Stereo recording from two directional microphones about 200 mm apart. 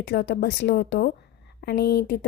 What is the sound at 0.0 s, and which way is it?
A woman's voice, 60° left (ahead or behind).